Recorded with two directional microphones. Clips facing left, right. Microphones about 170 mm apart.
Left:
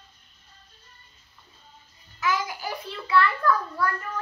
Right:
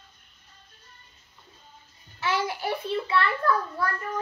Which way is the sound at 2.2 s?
30° right (ahead or behind).